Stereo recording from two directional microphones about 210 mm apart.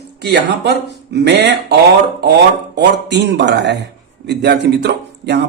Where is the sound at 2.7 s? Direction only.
55° right (ahead or behind).